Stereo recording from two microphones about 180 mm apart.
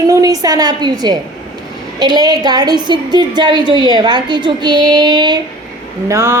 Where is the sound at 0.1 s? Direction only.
20° right (ahead or behind).